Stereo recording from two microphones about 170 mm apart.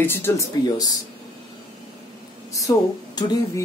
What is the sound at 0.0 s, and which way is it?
Speech, 15° left (ahead or behind).